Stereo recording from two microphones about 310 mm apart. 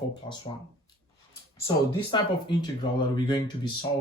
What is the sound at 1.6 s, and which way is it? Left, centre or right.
Speech, centre.